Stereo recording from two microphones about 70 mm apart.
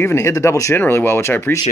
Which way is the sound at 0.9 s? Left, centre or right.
Left.